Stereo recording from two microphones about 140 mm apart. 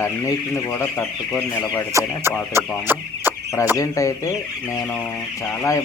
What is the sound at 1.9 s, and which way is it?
Chicken, 15° right (ahead or behind).